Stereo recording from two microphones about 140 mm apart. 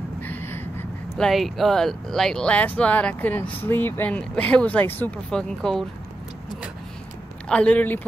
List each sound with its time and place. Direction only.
0.2 s a sound: 15° left (ahead or behind)
1.1 s speech: centre (ahead or behind)
7.4 s speech: 10° left (ahead or behind)